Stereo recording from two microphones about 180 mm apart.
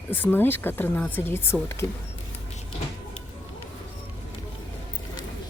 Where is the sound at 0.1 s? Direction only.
10° left (ahead or behind).